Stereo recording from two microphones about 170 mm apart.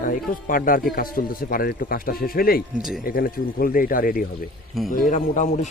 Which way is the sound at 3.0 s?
60° left (ahead or behind).